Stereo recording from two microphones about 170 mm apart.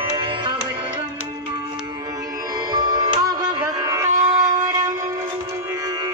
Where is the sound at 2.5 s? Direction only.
20° right (ahead or behind).